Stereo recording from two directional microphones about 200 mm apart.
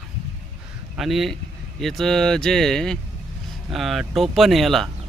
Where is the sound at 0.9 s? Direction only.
Centre (ahead or behind).